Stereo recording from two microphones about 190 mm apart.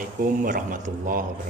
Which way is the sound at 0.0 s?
45° right (ahead or behind).